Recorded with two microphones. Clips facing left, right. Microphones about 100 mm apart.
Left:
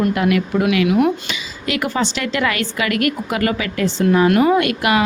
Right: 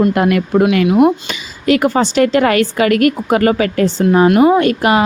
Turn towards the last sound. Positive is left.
turn(degrees=-35)  # may be behind; listen again after turning